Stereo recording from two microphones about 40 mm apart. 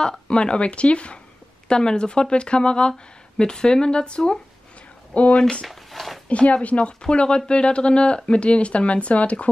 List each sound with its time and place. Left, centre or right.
0.3 s speech: left
5.7 s a sound: centre
6.2 s speech: left
7.0 s speech: left